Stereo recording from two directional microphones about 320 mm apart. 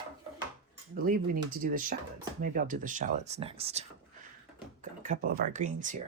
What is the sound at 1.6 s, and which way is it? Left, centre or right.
Speech, right.